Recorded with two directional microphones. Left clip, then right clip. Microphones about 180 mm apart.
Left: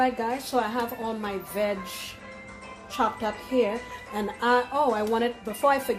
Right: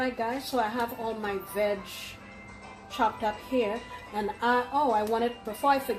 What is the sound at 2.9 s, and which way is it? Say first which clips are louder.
A woman's voice: left 1 dB; 45° left (ahead or behind).